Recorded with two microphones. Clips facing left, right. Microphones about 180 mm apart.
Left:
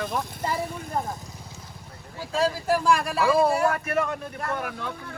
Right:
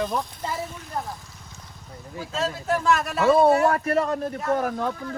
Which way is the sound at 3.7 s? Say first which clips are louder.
Right 3 dB; 35° right (ahead or behind).